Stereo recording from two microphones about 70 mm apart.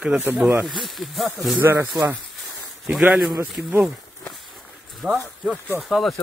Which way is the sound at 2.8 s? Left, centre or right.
Right.